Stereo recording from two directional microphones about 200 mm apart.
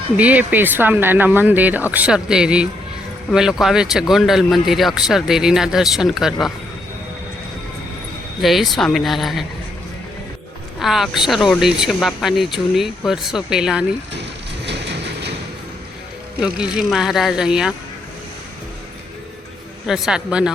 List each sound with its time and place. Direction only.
0.2 s speech: 10° right (ahead or behind)
8.4 s speech: centre (ahead or behind)
10.8 s speech: centre (ahead or behind)
14.7 s vehicle: 60° right (ahead or behind)
16.4 s speech: 5° right (ahead or behind)
19.9 s speech: 5° right (ahead or behind)